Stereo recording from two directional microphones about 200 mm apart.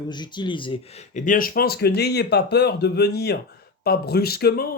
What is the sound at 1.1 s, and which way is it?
Speech, 40° left (ahead or behind).